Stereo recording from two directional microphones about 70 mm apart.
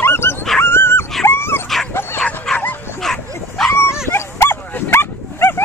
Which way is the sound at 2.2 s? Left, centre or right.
Centre.